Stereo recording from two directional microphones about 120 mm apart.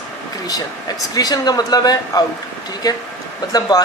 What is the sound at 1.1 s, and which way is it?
Speech, 35° left (ahead or behind).